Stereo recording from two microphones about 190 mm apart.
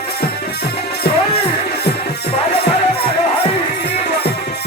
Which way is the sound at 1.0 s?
55° left (ahead or behind).